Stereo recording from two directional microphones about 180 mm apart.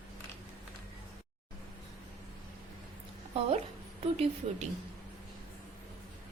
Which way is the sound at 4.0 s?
35° right (ahead or behind).